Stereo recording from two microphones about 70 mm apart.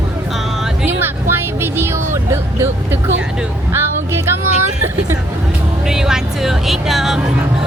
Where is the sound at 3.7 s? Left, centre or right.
Right.